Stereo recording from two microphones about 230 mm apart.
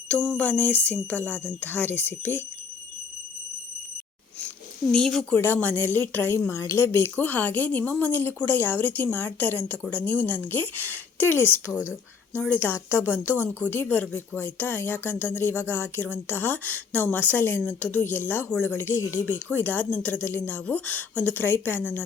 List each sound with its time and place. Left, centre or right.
0.1 s speech: centre
4.9 s speech: centre